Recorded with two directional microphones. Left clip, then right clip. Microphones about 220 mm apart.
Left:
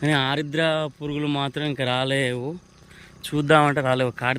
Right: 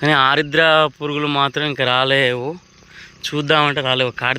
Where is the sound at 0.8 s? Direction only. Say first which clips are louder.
Right 12 dB; 25° right (ahead or behind).